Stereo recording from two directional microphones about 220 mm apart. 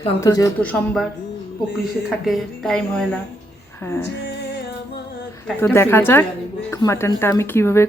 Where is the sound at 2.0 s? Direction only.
Centre (ahead or behind).